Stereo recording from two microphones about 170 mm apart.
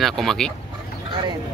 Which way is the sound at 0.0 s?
Centre (ahead or behind).